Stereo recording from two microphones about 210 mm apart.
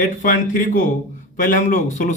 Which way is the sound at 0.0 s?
40° left (ahead or behind).